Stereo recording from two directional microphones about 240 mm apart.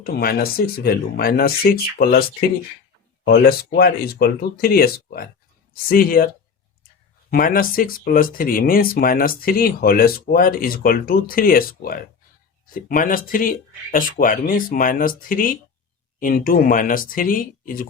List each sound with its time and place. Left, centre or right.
0.0 s speech: left
3.2 s speech: left
7.3 s speech: left